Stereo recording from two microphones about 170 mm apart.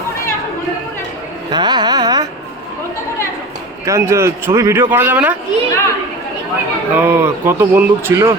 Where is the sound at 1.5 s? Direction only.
25° right (ahead or behind).